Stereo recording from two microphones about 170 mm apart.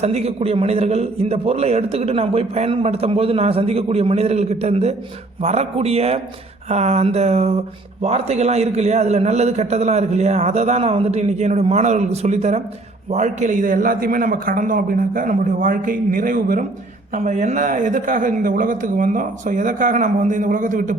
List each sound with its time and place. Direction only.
0.0 s a man's voice: 40° right (ahead or behind)